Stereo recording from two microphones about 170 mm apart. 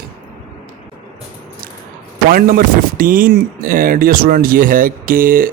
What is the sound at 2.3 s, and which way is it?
Speech, 55° right (ahead or behind).